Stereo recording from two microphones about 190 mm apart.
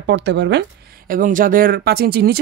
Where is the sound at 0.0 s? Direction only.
65° right (ahead or behind).